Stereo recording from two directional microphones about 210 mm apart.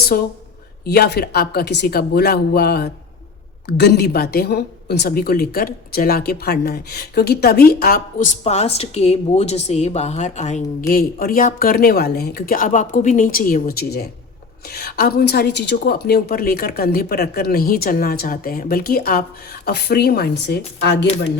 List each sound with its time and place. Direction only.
0.1 s a woman's voice: 45° left (ahead or behind)
8.4 s a woman's voice: 30° left (ahead or behind); by 21.1 s 55° left (ahead or behind)